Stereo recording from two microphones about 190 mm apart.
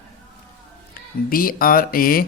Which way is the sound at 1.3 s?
50° left (ahead or behind).